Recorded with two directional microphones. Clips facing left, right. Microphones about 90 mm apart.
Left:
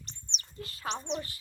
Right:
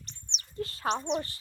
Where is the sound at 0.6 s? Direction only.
40° right (ahead or behind).